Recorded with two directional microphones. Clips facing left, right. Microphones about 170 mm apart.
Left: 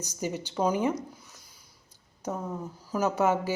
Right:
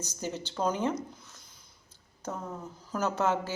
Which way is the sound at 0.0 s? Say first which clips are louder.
Left 3 dB; 15° left (ahead or behind).